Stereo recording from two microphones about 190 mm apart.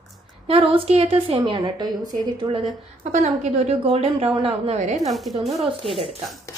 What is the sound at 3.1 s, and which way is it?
A woman's voice, 40° right (ahead or behind).